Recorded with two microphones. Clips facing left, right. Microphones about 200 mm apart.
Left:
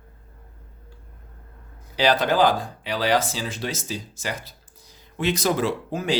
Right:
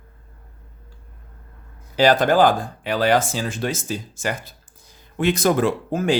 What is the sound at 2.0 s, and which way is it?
Speech, 50° right (ahead or behind).